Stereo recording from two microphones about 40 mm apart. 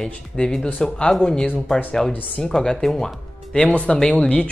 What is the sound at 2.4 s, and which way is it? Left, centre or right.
Speech, centre.